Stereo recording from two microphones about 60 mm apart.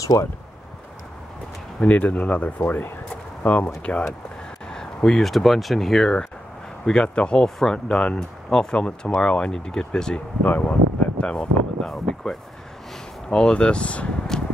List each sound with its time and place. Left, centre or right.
0.0 s speech: left
1.8 s speech: left
4.6 s speech: centre
6.9 s speech: centre
10.4 s a sound: left
11.2 s speech: centre
11.9 s speech: centre
14.3 s a sound: centre